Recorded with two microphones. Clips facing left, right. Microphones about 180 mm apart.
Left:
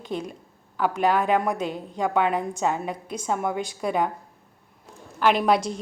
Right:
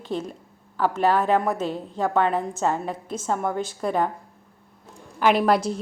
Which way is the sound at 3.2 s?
5° left (ahead or behind).